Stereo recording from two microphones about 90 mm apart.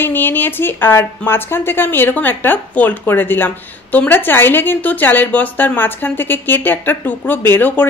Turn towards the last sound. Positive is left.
turn(degrees=20)  # may be behind; listen again after turning